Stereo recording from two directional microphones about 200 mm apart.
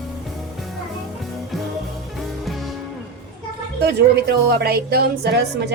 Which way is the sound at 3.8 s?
55° right (ahead or behind).